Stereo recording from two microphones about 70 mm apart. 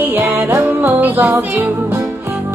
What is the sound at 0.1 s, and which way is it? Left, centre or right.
Music, right.